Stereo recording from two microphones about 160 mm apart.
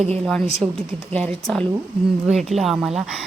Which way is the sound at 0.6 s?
20° right (ahead or behind).